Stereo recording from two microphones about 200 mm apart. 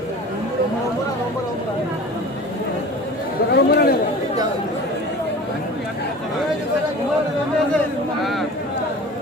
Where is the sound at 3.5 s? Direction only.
55° left (ahead or behind).